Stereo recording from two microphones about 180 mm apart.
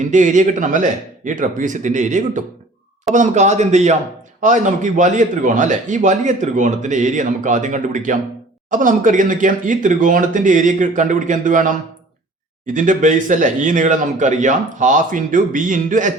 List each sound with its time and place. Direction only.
0.0 s a man's voice: 45° right (ahead or behind)